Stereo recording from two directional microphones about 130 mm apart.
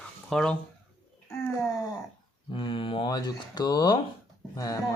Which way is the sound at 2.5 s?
40° left (ahead or behind).